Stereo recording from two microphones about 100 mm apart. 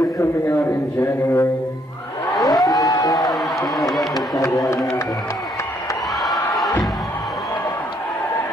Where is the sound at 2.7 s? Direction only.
40° left (ahead or behind).